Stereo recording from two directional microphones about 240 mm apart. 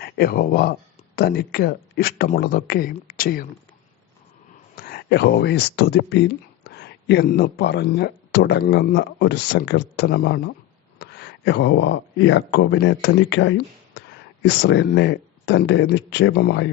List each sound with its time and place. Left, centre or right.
0.0 s speech: left
4.7 s speech: left